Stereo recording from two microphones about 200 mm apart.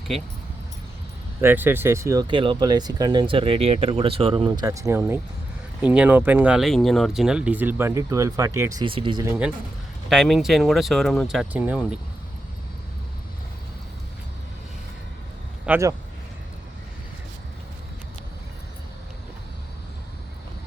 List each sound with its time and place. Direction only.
1.4 s speech: 10° right (ahead or behind)
10.1 s speech: centre (ahead or behind)
15.6 s speech: 10° right (ahead or behind)